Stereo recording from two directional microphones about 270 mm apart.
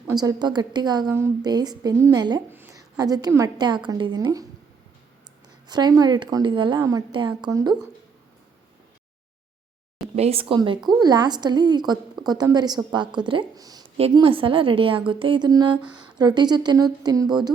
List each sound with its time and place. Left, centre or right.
0.1 s a woman's voice: centre
5.6 s a woman's voice: centre
10.2 s a woman's voice: right
15.8 s speech: centre
16.1 s a woman's voice: centre